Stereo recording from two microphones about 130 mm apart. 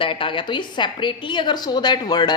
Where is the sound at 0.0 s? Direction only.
40° left (ahead or behind).